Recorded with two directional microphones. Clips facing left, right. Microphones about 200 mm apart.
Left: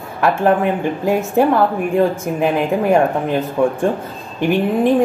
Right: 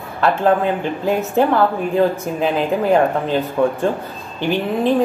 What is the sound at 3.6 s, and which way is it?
Speech, 15° left (ahead or behind).